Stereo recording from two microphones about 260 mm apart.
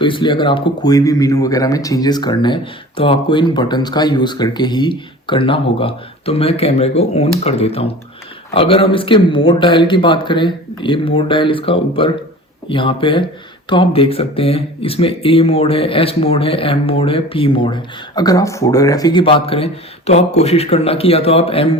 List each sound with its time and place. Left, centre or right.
0.0 s speech: centre